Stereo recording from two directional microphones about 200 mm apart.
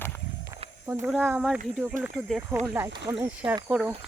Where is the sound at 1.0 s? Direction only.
10° right (ahead or behind).